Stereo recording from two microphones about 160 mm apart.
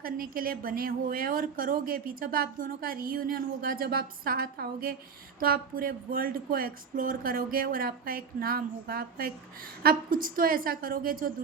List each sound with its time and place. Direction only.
0.0 s a woman's voice: 65° right (ahead or behind)